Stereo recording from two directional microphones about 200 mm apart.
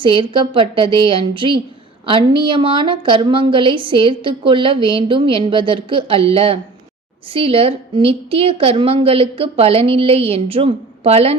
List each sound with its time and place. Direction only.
0.0 s a woman's voice: 25° right (ahead or behind)